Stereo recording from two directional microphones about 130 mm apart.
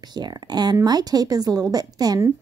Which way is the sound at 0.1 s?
35° right (ahead or behind).